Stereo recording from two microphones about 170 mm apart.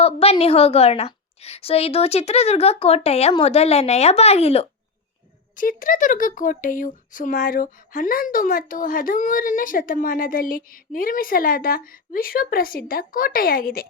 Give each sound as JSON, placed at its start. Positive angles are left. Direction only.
{"t": 0.0, "sound": "a woman's voice", "side_deg": 35}
{"t": 5.5, "sound": "speech", "side_deg": 55}